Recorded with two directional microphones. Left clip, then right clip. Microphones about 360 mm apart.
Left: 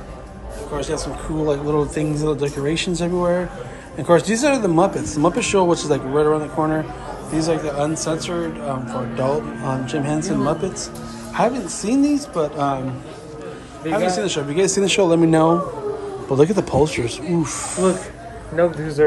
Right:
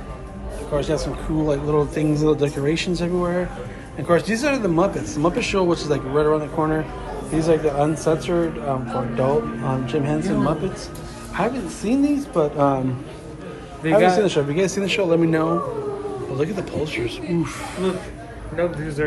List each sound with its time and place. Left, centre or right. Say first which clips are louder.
0.7 s speech: right 2 dB; centre
13.9 s speech: right 4 dB; centre
19.0 s speech: left 9 dB; left